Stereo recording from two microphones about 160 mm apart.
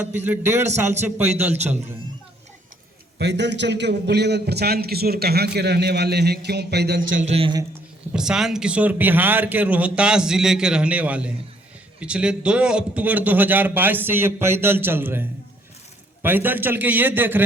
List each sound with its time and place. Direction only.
0.3 s a man's voice: 15° right (ahead or behind)
3.2 s a man's voice: 90° right
7.3 s a man's voice: 35° right (ahead or behind)
8.1 s a man's voice: 5° right (ahead or behind)